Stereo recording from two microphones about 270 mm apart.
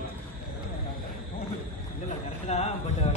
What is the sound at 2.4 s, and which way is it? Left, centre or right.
Speech, left.